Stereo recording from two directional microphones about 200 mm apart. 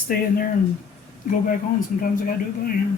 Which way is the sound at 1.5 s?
40° left (ahead or behind).